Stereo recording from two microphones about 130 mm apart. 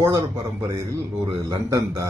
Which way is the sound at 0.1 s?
30° right (ahead or behind).